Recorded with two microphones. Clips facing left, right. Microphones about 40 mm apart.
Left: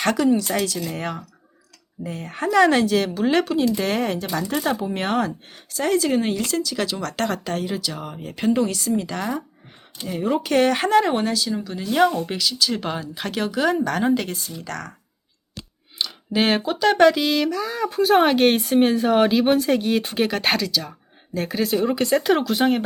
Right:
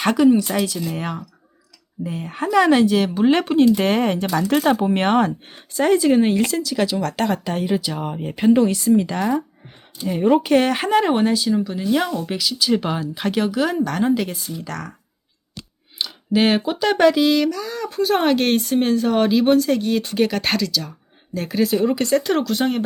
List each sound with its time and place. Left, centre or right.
0.0 s speech: centre
3.2 s speech: centre
3.4 s speech: right
5.7 s speech: right
6.0 s speech: centre
16.0 s speech: centre